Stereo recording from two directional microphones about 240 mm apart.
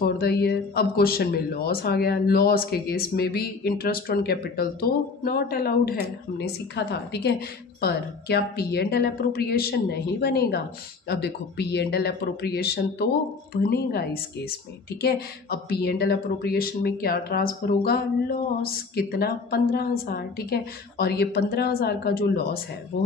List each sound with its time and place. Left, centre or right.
0.0 s speech: left